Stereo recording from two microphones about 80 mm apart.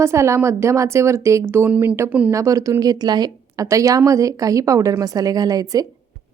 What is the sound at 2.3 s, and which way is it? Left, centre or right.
Speech, right.